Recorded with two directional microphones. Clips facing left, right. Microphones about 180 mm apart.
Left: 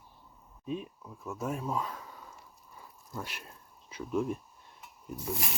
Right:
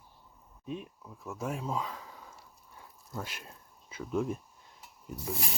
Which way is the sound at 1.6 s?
25° right (ahead or behind).